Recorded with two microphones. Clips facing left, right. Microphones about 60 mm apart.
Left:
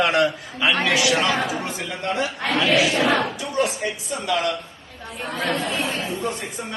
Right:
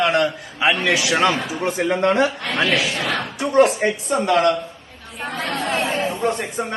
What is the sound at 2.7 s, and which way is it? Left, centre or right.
Speech, centre.